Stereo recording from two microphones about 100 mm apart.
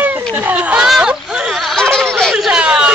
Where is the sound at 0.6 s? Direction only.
10° right (ahead or behind).